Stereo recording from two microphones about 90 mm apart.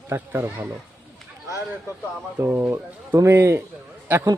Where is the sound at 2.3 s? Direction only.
20° right (ahead or behind).